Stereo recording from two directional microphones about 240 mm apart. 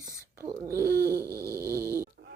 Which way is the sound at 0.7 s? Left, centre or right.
Right.